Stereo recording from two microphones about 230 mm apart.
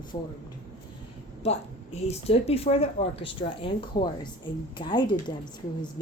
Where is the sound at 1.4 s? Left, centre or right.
Left.